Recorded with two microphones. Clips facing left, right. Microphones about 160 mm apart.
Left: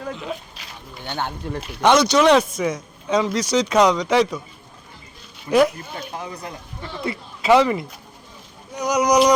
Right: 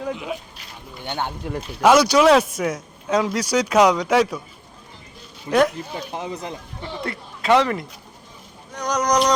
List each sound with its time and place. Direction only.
0.0 s a man's voice: 10° right (ahead or behind)
5.5 s speech: centre (ahead or behind)
5.7 s speech: 25° right (ahead or behind)
7.0 s speech: 5° left (ahead or behind)